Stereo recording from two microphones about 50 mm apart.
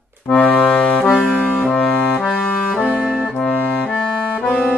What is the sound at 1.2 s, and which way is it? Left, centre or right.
Music, centre.